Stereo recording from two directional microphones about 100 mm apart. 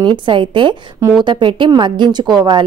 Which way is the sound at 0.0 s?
50° right (ahead or behind).